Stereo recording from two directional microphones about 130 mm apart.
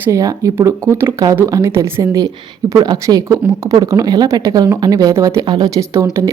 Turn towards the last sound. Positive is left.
turn(degrees=-25)  # may be behind; listen again after turning